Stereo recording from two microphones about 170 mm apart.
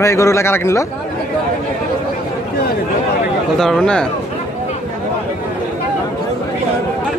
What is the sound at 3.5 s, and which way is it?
Speech, 5° left (ahead or behind).